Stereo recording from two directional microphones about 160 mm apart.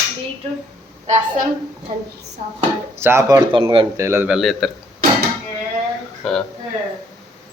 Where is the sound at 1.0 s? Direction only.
45° right (ahead or behind).